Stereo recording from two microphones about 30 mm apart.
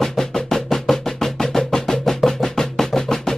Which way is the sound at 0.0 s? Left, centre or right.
Centre.